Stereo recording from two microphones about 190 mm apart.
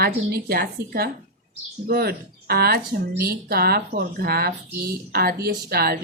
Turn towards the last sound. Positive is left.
turn(degrees=-55)  # may be behind; listen again after turning